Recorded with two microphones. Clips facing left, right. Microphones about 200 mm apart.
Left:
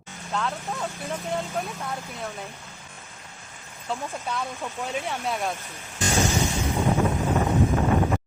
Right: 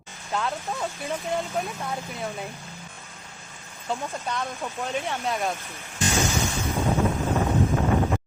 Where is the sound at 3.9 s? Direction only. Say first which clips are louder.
Right 1 dB; 5° left (ahead or behind).